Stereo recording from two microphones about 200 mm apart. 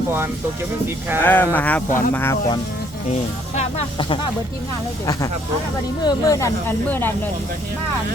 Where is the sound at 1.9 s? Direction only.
40° left (ahead or behind).